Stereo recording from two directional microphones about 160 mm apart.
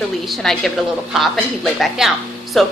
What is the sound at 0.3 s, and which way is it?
A woman's voice, centre (ahead or behind).